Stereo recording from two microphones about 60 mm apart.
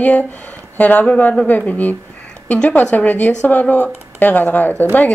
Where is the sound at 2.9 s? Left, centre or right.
Left.